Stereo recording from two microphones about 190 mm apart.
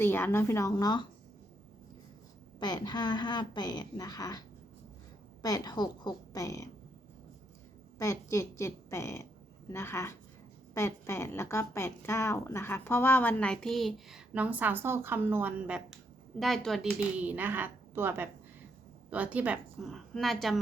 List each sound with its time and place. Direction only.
0.0 s a woman's voice: 10° left (ahead or behind)
2.6 s a woman's voice: 20° left (ahead or behind)
7.9 s a woman's voice: 15° left (ahead or behind); by 20.6 s centre (ahead or behind)